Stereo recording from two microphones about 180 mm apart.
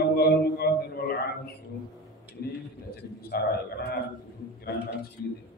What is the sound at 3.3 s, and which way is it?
Mantra, 60° left (ahead or behind).